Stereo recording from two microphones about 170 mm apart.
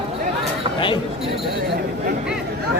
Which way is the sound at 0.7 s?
30° left (ahead or behind).